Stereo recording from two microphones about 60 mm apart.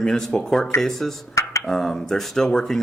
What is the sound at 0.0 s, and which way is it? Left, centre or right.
Speech, centre.